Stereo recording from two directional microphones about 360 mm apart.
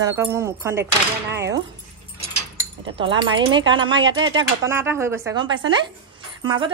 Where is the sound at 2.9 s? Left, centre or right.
Centre.